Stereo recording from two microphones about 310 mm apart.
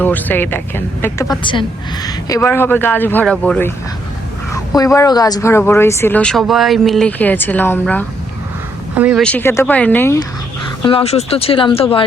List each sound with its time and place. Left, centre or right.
0.0 s speech: centre
10.8 s speech: centre